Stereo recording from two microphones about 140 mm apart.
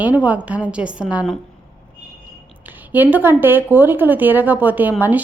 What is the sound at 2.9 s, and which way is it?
A woman's voice, 10° right (ahead or behind).